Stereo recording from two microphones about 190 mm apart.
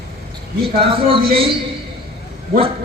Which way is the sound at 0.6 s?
25° right (ahead or behind).